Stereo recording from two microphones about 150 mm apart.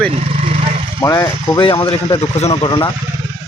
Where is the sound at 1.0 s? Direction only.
25° left (ahead or behind); by 2.7 s 40° left (ahead or behind).